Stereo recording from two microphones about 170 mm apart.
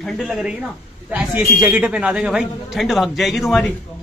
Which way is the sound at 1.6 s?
5° right (ahead or behind).